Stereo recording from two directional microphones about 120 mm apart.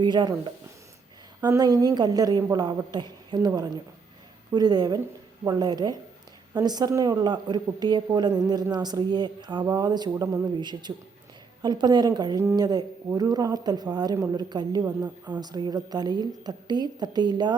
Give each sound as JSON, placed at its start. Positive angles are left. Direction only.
{"t": 0.0, "sound": "a woman's voice", "side_deg": -40}